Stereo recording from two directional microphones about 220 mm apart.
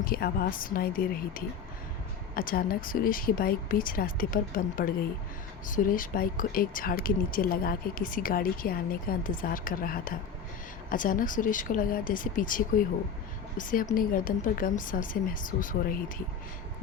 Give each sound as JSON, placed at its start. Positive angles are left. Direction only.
{"t": 0.0, "sound": "speech", "side_deg": 40}